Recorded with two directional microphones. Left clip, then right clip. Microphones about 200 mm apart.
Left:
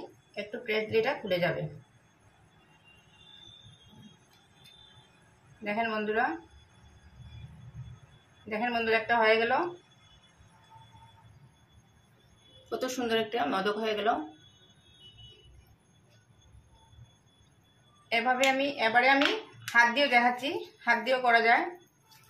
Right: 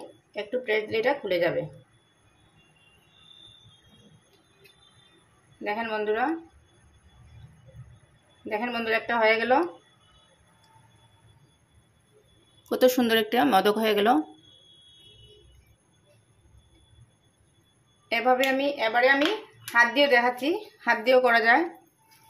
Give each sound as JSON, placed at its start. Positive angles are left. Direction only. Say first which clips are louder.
{"t": 0.3, "sound": "speech", "louder": "right 6 dB", "side_deg": -40}
{"t": 5.6, "sound": "speech", "louder": "right 2 dB", "side_deg": -40}
{"t": 8.5, "sound": "speech", "louder": "right 1 dB", "side_deg": -40}
{"t": 12.6, "sound": "speech", "louder": "right 11 dB", "side_deg": -60}
{"t": 18.0, "sound": "a woman's voice", "louder": "right 3 dB", "side_deg": -40}